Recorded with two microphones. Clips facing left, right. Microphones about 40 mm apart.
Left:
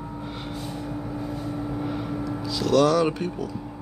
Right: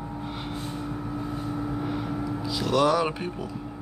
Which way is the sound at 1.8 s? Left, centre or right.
Centre.